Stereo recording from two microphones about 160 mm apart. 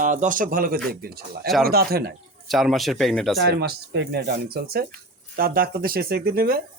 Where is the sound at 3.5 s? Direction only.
90° right.